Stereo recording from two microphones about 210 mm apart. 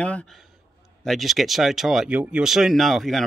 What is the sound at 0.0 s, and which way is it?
A man's voice, 5° left (ahead or behind).